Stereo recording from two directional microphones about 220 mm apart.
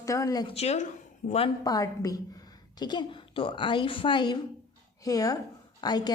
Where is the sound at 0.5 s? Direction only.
30° left (ahead or behind).